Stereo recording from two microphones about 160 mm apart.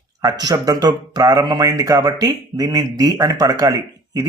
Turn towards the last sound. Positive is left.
turn(degrees=-20)  # may be behind; listen again after turning